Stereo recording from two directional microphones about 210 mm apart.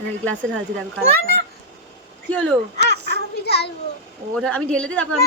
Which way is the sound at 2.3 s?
10° left (ahead or behind).